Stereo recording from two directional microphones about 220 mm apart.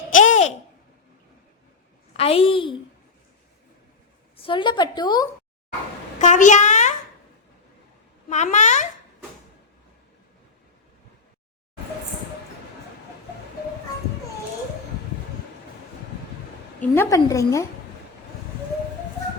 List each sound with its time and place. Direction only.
0.1 s babbling: 35° left (ahead or behind)
2.1 s a woman's voice: 25° left (ahead or behind)
4.4 s a woman's voice: 25° left (ahead or behind)
6.1 s a woman's voice: 35° left (ahead or behind)
8.3 s a child's voice: 30° left (ahead or behind)
16.8 s a woman's voice: 10° left (ahead or behind)